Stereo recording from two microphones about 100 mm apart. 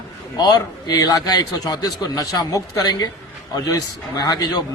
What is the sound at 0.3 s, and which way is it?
A man's voice, 40° left (ahead or behind).